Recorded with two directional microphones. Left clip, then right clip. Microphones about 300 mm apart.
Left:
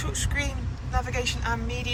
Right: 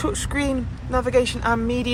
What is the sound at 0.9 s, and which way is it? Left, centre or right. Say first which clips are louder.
Speech: right 9 dB; centre.